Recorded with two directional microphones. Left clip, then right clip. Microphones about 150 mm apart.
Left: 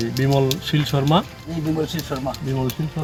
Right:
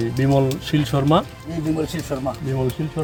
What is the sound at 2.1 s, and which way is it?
Speech, 20° right (ahead or behind).